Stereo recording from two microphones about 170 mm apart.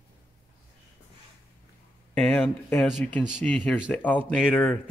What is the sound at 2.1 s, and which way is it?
Speech, 5° left (ahead or behind).